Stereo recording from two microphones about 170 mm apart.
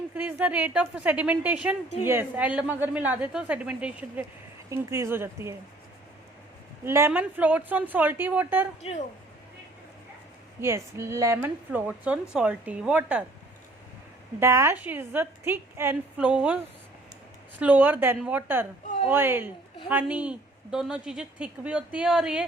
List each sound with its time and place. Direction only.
0.1 s a woman's voice: 10° right (ahead or behind)
6.8 s a woman's voice: 15° right (ahead or behind)
8.8 s a woman's voice: 40° left (ahead or behind)
10.6 s a woman's voice: 15° right (ahead or behind)
14.3 s a woman's voice: 15° right (ahead or behind)
17.6 s a woman's voice: 10° right (ahead or behind)